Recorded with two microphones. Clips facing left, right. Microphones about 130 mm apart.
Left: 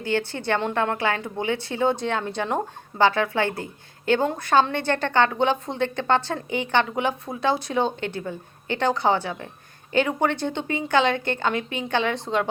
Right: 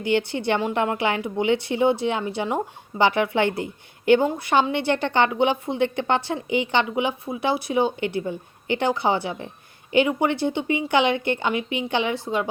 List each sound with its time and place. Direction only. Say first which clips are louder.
0.0 s speech: right 3 dB; 15° right (ahead or behind)